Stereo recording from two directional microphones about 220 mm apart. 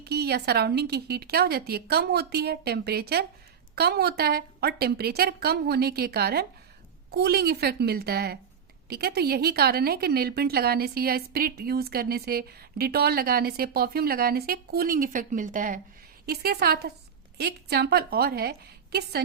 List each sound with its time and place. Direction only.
0.0 s a woman's voice: 45° right (ahead or behind)